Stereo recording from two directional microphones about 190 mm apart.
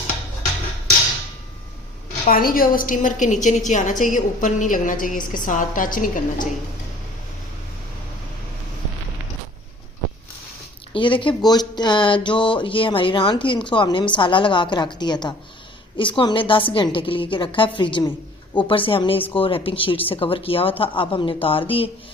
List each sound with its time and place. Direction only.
2.2 s a woman's voice: 50° left (ahead or behind)
10.9 s speech: 25° left (ahead or behind)